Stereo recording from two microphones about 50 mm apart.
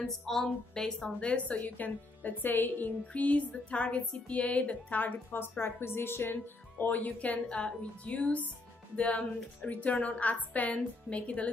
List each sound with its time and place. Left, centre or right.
0.0 s a woman's voice: centre
1.2 s a woman's voice: left
3.1 s a woman's voice: left
7.4 s a woman's voice: left